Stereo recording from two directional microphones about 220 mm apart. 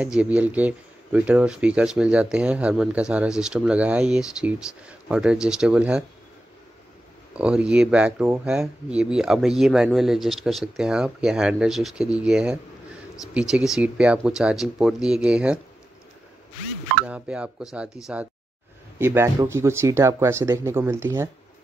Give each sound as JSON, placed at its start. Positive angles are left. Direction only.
{"t": 0.0, "sound": "speech", "side_deg": -5}
{"t": 7.3, "sound": "speech", "side_deg": -5}
{"t": 17.0, "sound": "speech", "side_deg": -5}